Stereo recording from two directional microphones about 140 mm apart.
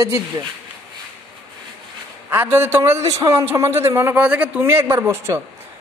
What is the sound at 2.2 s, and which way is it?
A man's voice, 15° right (ahead or behind).